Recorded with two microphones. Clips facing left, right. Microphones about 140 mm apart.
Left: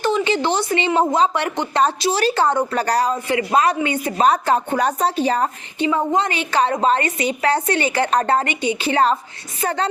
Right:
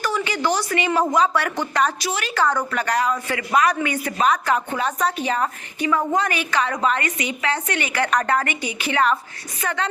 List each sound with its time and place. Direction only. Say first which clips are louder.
0.0 s speech: left 5 dB; 25° left (ahead or behind)
3.2 s a woman's voice: left 3 dB; 25° left (ahead or behind)